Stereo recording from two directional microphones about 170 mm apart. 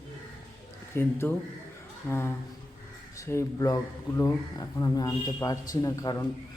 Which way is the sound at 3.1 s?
20° left (ahead or behind).